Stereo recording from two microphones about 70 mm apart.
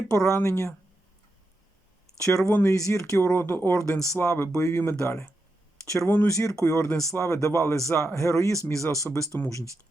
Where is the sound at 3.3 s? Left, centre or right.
Left.